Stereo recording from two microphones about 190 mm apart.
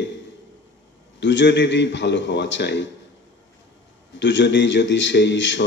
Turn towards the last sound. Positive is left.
turn(degrees=70)  # may be behind; listen again after turning